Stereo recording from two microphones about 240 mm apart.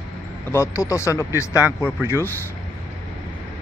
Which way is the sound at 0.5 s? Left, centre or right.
Centre.